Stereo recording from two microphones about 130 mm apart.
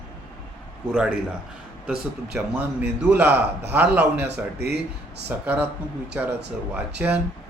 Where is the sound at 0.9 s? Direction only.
5° right (ahead or behind).